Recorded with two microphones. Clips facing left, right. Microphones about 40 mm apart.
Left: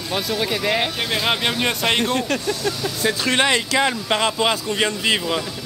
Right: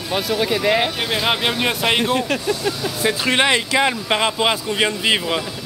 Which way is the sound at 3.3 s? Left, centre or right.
Right.